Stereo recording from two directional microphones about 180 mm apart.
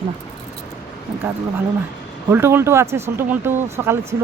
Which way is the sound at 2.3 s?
15° right (ahead or behind).